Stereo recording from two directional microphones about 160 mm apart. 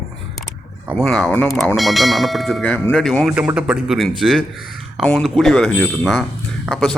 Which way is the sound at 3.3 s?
5° right (ahead or behind).